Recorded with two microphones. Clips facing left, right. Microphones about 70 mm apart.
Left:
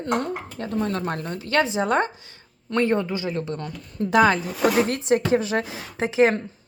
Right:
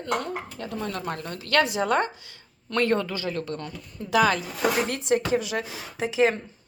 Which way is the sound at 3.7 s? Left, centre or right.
Left.